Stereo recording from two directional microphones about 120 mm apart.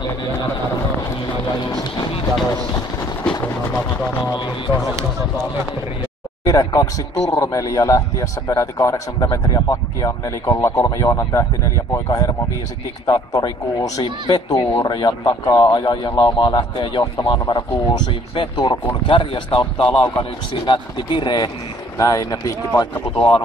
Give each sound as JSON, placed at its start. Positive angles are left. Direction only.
{"t": 1.6, "sound": "a man's voice", "side_deg": 35}
{"t": 3.4, "sound": "speech", "side_deg": 25}
{"t": 6.4, "sound": "a man's voice", "side_deg": 30}
{"t": 21.9, "sound": "speech", "side_deg": 25}
{"t": 23.1, "sound": "speech", "side_deg": 50}